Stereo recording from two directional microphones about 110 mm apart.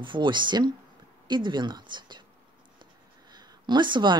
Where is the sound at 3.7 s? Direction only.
45° right (ahead or behind).